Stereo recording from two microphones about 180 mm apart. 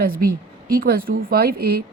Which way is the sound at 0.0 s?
55° right (ahead or behind).